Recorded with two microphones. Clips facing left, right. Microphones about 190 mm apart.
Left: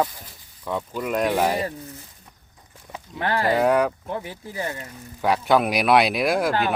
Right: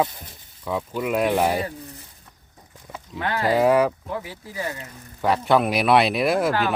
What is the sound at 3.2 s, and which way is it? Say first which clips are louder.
Speech: left 2 dB; 35° left (ahead or behind).